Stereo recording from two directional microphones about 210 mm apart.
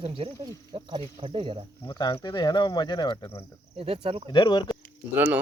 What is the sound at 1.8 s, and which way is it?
Speech, 20° left (ahead or behind).